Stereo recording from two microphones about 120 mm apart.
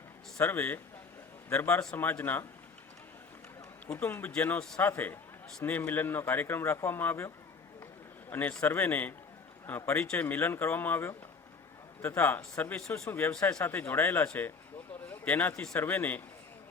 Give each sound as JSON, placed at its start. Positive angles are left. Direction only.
{"t": 0.3, "sound": "a man's voice", "side_deg": 15}
{"t": 3.9, "sound": "speech", "side_deg": 15}
{"t": 8.3, "sound": "a man's voice", "side_deg": 15}